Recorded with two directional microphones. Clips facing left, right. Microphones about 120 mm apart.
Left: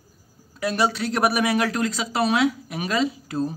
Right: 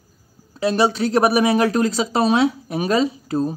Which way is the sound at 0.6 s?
30° right (ahead or behind).